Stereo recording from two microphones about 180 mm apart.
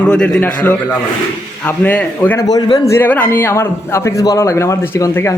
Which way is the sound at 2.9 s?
10° left (ahead or behind).